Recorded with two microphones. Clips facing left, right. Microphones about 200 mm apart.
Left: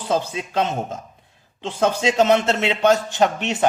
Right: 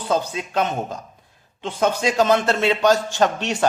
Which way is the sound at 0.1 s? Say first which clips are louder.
Even; 25° left (ahead or behind).